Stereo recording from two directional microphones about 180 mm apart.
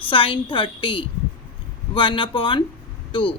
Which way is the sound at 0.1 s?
30° left (ahead or behind).